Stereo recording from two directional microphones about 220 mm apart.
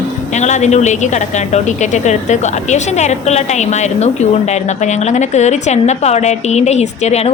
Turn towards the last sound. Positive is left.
turn(degrees=30)  # may be behind; listen again after turning